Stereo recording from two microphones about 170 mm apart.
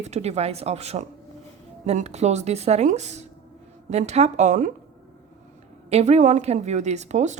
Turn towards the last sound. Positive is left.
turn(degrees=-45)  # may be behind; listen again after turning